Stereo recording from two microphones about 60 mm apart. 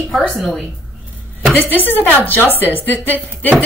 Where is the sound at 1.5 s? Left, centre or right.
Left.